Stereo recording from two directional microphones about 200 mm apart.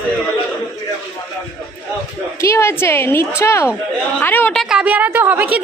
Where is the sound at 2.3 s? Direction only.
15° left (ahead or behind).